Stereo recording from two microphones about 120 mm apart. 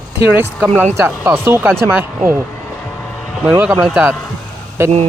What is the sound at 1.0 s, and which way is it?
Speech, 20° right (ahead or behind).